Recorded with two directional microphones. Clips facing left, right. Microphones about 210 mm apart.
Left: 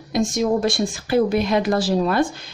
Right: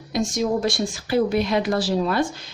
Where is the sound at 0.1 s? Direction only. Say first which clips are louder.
Left 3 dB; 50° left (ahead or behind).